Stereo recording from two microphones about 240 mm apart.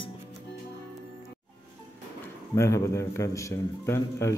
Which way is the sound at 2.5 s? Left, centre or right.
Centre.